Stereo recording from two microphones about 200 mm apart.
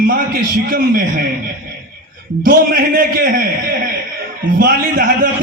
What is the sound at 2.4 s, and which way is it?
A man's voice, 45° right (ahead or behind).